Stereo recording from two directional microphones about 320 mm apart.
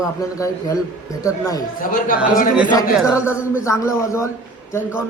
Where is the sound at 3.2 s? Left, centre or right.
Centre.